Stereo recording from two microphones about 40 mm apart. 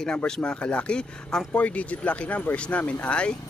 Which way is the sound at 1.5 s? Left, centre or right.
Left.